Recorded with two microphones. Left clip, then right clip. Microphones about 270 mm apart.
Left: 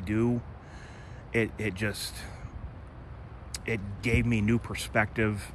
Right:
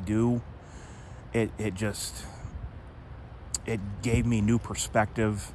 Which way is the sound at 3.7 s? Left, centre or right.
Centre.